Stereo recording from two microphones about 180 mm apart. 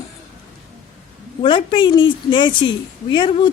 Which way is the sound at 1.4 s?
25° left (ahead or behind).